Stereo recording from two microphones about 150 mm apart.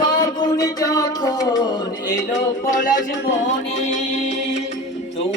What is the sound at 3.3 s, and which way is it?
Music, 50° left (ahead or behind).